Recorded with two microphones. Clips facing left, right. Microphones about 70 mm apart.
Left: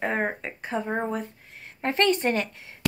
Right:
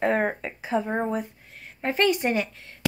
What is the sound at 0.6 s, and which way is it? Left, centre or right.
A woman's voice, centre.